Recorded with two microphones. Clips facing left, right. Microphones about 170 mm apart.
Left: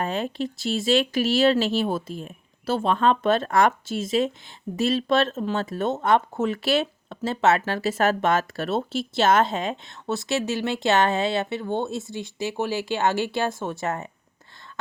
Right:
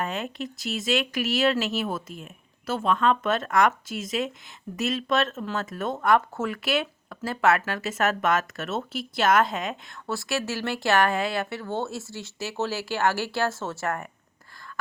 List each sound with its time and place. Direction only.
0.0 s speech: 30° left (ahead or behind)